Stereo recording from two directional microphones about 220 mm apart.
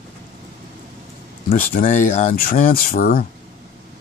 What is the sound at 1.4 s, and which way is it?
Speech, 40° left (ahead or behind).